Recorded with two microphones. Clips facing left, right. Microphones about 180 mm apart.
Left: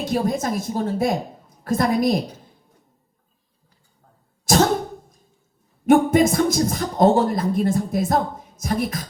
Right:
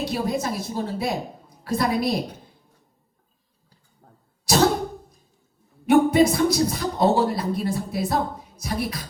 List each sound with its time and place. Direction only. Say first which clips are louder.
0.0 s speech: left 3 dB; 45° left (ahead or behind)
4.5 s cough: left 4 dB; 45° left (ahead or behind)
5.8 s speech: left 1 dB; 45° left (ahead or behind)